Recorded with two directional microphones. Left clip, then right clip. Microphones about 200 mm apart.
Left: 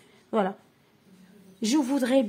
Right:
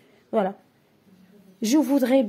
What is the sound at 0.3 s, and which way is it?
Speech, centre (ahead or behind).